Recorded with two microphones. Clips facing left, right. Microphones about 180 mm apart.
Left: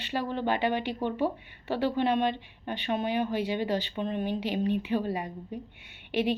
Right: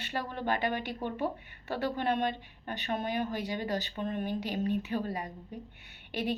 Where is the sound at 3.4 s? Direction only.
25° left (ahead or behind).